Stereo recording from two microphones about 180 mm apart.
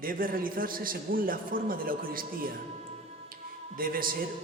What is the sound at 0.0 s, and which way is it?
A man's voice, 50° right (ahead or behind).